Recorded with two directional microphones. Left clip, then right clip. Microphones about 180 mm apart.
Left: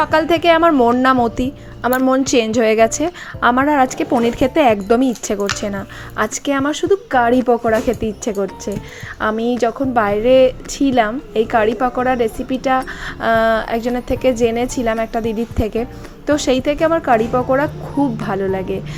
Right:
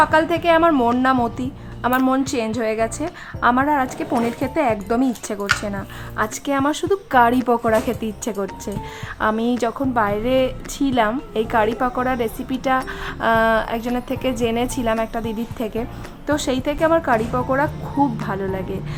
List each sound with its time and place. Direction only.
0.0 s a woman's voice: 25° left (ahead or behind)